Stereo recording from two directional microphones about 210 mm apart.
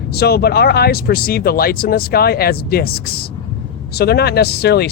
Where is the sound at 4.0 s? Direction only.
50° left (ahead or behind).